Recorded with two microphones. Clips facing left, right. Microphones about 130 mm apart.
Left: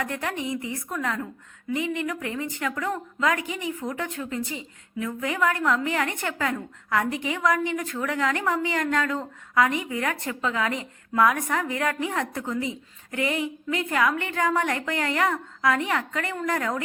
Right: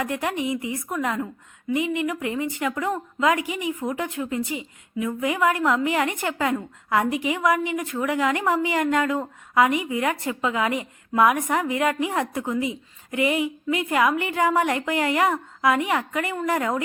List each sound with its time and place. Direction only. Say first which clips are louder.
0.0 s a woman's voice: right 4 dB; 15° right (ahead or behind)